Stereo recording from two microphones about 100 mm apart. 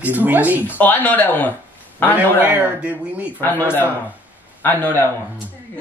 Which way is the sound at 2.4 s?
20° right (ahead or behind).